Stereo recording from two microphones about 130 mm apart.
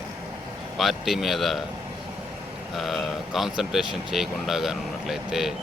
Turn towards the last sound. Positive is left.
turn(degrees=0)  # may be behind; listen again after turning